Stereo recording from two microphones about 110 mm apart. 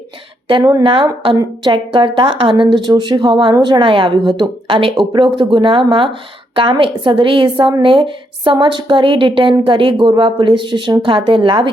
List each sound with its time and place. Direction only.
0.8 s a woman's voice: 55° right (ahead or behind)